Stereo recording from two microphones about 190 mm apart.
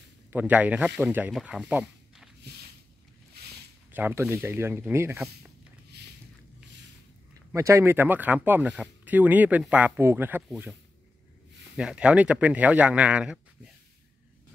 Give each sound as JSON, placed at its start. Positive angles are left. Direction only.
{"t": 0.3, "sound": "speech", "side_deg": -10}
{"t": 3.4, "sound": "a sound", "side_deg": -60}
{"t": 3.9, "sound": "speech", "side_deg": -10}
{"t": 7.5, "sound": "speech", "side_deg": -15}